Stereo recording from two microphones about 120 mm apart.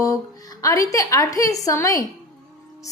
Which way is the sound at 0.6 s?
30° left (ahead or behind).